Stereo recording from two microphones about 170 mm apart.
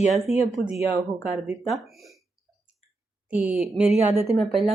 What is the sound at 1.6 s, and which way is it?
Speech, centre (ahead or behind).